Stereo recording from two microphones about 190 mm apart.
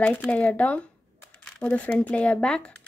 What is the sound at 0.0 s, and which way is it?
Speech, 10° left (ahead or behind).